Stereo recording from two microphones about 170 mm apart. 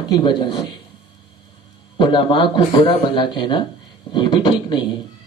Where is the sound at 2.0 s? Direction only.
30° left (ahead or behind).